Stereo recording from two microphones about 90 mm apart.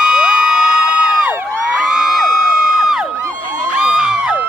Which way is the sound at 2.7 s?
5° right (ahead or behind).